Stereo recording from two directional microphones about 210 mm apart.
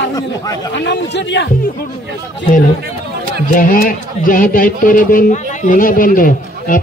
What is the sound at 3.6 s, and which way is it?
A man's voice, 40° left (ahead or behind).